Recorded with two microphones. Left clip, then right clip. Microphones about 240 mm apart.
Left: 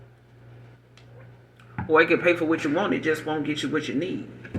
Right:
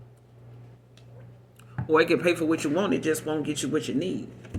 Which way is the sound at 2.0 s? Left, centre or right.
Right.